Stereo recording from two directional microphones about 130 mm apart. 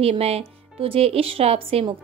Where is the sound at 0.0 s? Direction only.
50° right (ahead or behind).